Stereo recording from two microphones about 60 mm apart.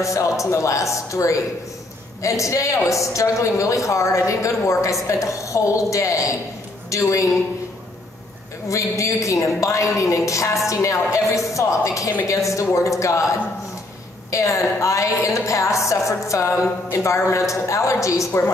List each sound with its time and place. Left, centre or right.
0.0 s a woman's voice: left
8.6 s a woman's voice: left
14.3 s a woman's voice: left